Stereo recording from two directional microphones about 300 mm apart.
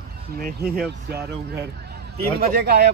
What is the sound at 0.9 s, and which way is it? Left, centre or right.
Speech, right.